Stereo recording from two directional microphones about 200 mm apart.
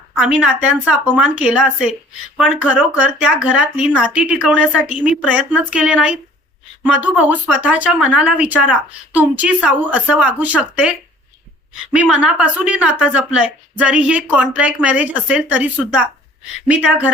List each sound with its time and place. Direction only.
0.2 s a woman's voice: 5° right (ahead or behind)
11.9 s speech: 5° right (ahead or behind)